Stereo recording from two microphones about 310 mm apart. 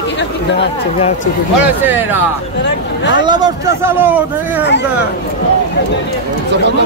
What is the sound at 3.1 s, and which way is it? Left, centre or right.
A man's voice, centre.